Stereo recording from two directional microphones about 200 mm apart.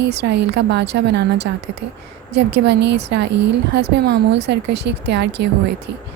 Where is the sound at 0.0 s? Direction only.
55° right (ahead or behind).